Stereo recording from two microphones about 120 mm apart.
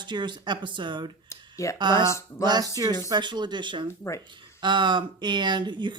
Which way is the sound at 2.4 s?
35° right (ahead or behind).